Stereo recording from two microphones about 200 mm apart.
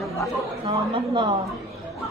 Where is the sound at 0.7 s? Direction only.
25° right (ahead or behind).